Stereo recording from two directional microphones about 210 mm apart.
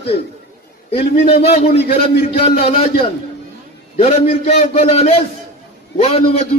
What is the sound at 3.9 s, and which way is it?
A man's voice, 30° left (ahead or behind).